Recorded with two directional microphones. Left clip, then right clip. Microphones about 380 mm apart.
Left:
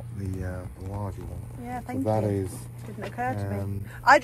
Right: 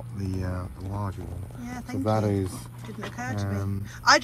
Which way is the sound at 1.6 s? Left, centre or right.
Centre.